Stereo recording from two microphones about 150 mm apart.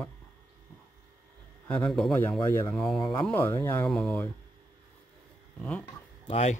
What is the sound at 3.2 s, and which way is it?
Speech, 15° left (ahead or behind).